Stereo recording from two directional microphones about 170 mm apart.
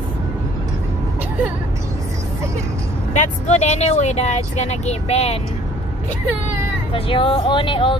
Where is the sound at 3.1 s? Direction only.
45° left (ahead or behind).